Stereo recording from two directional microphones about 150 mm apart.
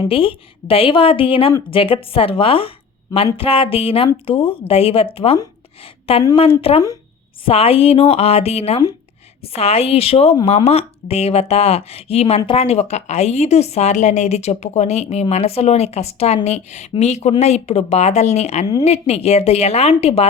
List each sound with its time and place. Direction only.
0.1 s a woman's voice: 35° left (ahead or behind)